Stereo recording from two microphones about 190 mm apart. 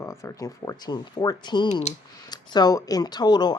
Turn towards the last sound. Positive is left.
turn(degrees=20)  # may be behind; listen again after turning